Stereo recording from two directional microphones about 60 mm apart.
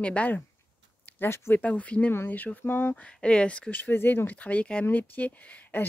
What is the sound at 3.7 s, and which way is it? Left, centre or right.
Speech, left.